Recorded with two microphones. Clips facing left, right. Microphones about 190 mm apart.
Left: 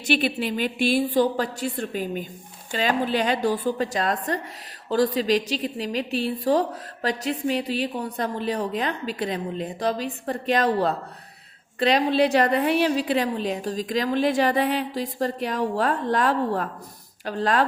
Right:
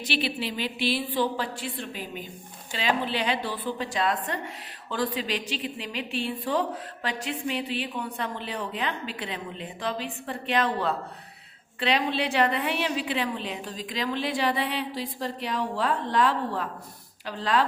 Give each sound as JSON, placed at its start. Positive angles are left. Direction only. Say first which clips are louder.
{"t": 0.0, "sound": "a woman's voice", "louder": "left 6 dB", "side_deg": 50}